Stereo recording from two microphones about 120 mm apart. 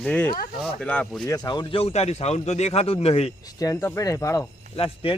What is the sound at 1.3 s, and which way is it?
Speech, 35° left (ahead or behind).